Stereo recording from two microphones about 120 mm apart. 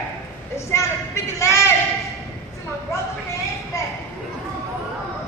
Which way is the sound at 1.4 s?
25° left (ahead or behind).